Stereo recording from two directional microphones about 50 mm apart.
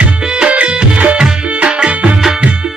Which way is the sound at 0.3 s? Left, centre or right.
Right.